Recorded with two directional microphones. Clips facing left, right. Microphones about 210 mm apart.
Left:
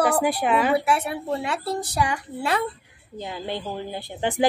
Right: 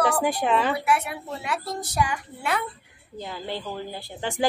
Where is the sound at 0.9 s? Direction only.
30° left (ahead or behind).